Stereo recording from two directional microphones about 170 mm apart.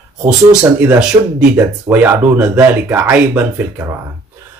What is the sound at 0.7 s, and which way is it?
Speech, 10° right (ahead or behind).